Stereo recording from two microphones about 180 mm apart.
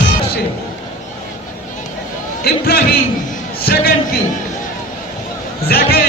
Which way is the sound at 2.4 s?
60° left (ahead or behind).